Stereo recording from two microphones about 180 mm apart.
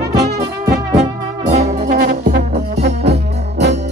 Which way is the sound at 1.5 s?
40° right (ahead or behind).